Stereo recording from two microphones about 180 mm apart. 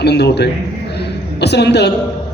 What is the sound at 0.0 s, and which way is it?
Speech, 70° left (ahead or behind).